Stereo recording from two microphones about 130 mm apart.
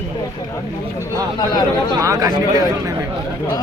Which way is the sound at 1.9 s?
25° right (ahead or behind).